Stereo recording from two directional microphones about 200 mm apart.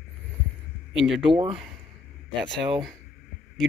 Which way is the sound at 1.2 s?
25° right (ahead or behind).